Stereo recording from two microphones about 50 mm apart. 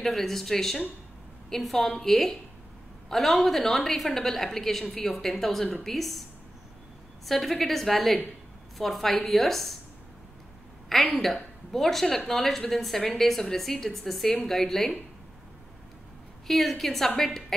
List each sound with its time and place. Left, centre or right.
0.0 s a woman's voice: centre
7.2 s a woman's voice: centre
11.1 s a woman's voice: centre
16.4 s a woman's voice: centre